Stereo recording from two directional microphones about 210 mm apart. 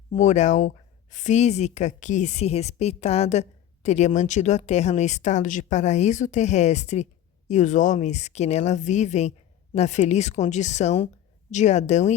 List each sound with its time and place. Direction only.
0.2 s speech: 35° left (ahead or behind)